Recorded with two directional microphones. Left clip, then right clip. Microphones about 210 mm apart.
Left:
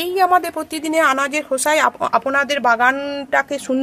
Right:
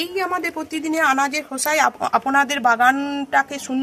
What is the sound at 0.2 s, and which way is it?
Speech, 45° left (ahead or behind).